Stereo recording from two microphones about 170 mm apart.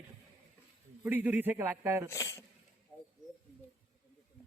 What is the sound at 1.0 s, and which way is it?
A man's voice, 10° right (ahead or behind).